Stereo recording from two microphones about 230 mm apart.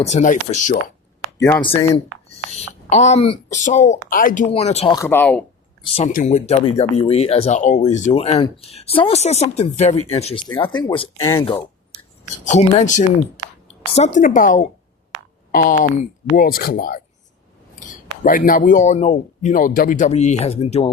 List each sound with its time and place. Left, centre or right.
0.0 s speech: left
1.4 s speech: centre
2.5 s speech: left
4.9 s speech: centre
6.1 s speech: left; by 11.6 s centre
12.5 s a woman's voice: left